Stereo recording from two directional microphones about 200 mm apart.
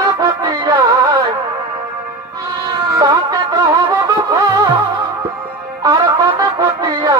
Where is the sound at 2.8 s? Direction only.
20° right (ahead or behind).